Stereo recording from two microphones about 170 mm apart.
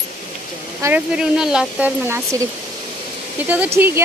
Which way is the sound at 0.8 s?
5° right (ahead or behind).